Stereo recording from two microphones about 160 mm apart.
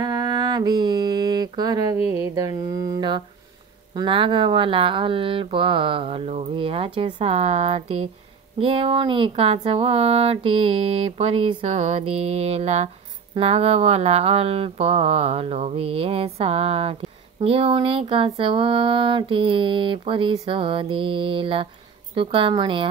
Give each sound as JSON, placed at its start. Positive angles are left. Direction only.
{"t": 0.0, "sound": "mantra", "side_deg": -20}
{"t": 3.9, "sound": "speech", "side_deg": -30}